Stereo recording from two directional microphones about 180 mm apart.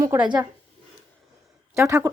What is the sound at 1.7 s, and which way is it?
Speech, 15° right (ahead or behind).